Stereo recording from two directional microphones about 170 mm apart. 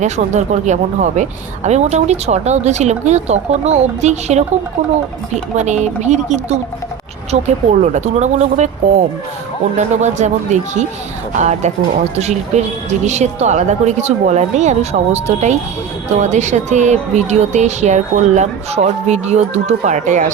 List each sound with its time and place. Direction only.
0.0 s a woman's voice: 45° right (ahead or behind)